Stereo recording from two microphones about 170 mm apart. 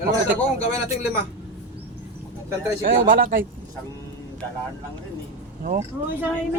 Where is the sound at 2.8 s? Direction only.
55° right (ahead or behind).